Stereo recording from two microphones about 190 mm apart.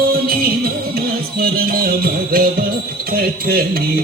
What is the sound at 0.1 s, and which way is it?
Music, 50° right (ahead or behind).